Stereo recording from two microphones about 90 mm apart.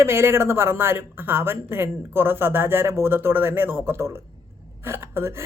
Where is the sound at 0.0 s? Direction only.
30° right (ahead or behind).